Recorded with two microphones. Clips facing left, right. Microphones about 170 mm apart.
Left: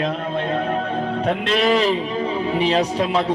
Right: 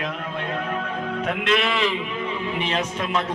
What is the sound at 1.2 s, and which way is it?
A man's voice, 35° left (ahead or behind).